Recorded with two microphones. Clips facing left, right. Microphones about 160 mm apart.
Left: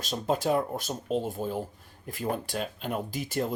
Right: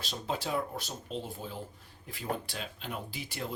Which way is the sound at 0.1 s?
45° left (ahead or behind).